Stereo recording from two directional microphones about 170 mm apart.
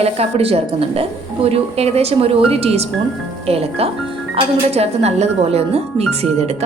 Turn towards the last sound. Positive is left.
turn(degrees=-40)  # may be behind; listen again after turning